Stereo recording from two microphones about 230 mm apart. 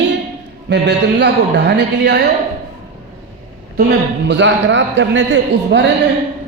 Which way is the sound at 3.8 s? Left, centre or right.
Right.